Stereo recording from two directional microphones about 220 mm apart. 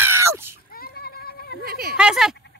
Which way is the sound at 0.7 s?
45° left (ahead or behind).